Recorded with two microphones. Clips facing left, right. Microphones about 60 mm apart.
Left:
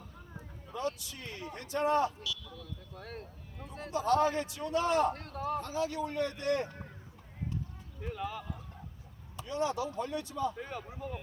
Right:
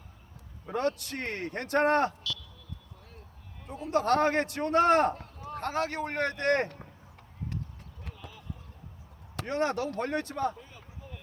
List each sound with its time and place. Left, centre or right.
0.7 s a man's voice: right
3.0 s a sound: left
3.9 s a man's voice: right
5.1 s a sound: left
5.5 s a man's voice: right
8.1 s clip-clop: left
9.3 s a man's voice: right
10.6 s speech: left